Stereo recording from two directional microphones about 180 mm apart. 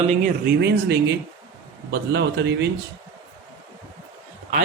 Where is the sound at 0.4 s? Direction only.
70° right (ahead or behind).